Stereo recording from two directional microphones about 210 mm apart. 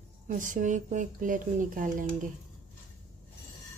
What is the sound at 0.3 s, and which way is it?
Speech, 40° right (ahead or behind).